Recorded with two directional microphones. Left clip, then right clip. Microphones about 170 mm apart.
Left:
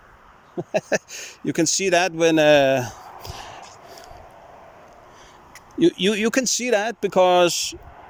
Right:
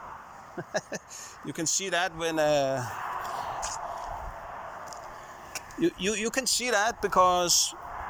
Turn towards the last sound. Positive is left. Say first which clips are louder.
# left 7 dB
turn(degrees=90)